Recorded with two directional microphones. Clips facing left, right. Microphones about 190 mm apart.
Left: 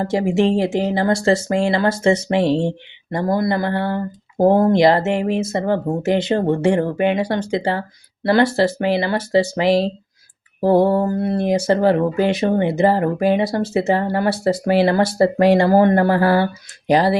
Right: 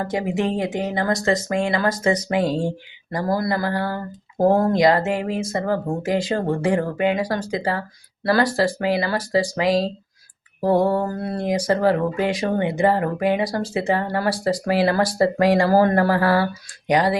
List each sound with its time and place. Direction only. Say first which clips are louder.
0.0 s speech: left 5 dB; 25° left (ahead or behind)